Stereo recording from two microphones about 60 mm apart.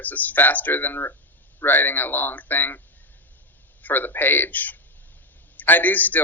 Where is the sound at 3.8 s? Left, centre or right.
Left.